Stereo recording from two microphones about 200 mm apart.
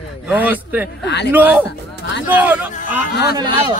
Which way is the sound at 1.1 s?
60° left (ahead or behind).